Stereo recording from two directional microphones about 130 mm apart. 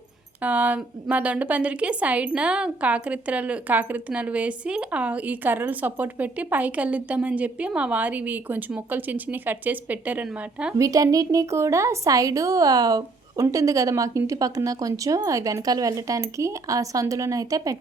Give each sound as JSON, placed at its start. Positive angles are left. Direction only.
{"t": 0.4, "sound": "a woman's voice", "side_deg": -10}
{"t": 10.8, "sound": "a woman's voice", "side_deg": -25}